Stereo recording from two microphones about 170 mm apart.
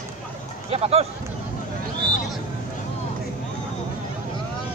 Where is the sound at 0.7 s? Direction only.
35° right (ahead or behind).